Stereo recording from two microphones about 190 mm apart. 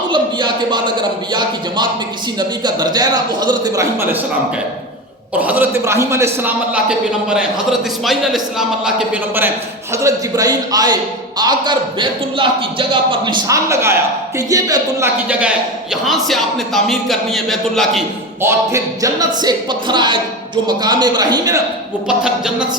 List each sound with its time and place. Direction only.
0.1 s a man's voice: 25° right (ahead or behind)
5.4 s a man's voice: 10° right (ahead or behind)
15.3 s a man's voice: 5° right (ahead or behind)
18.4 s a man's voice: 15° right (ahead or behind)
22.0 s a man's voice: 5° right (ahead or behind)